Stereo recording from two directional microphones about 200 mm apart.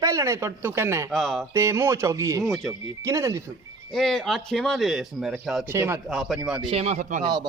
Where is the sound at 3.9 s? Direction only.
Centre (ahead or behind).